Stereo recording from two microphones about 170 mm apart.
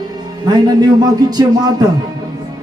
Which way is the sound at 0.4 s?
25° right (ahead or behind).